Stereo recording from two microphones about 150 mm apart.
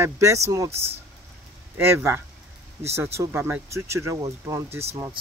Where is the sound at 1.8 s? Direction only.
15° right (ahead or behind).